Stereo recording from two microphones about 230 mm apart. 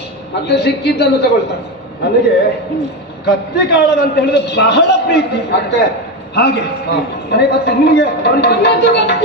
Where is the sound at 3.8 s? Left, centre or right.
Left.